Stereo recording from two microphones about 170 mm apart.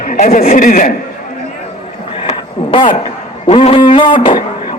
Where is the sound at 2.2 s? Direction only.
30° left (ahead or behind).